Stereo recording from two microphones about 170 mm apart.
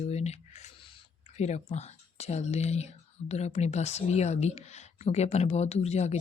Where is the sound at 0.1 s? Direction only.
40° left (ahead or behind).